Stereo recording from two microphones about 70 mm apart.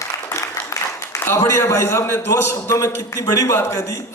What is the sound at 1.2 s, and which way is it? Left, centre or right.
A man's voice, left.